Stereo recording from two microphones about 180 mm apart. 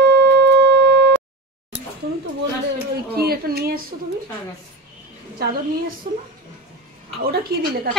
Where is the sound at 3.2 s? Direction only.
60° right (ahead or behind).